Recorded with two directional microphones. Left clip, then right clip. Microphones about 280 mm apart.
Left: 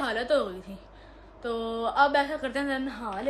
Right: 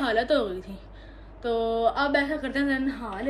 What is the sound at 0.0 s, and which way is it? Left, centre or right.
Speech, centre.